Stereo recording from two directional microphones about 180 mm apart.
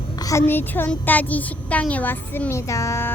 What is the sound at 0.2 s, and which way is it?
A child's voice, 15° left (ahead or behind).